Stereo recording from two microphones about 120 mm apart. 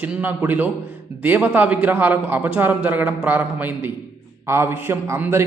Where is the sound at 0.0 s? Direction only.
15° right (ahead or behind).